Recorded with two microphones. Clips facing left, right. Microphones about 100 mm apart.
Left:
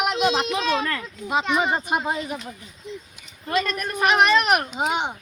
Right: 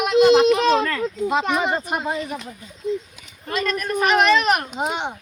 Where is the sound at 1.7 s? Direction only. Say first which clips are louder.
Even; 15° left (ahead or behind).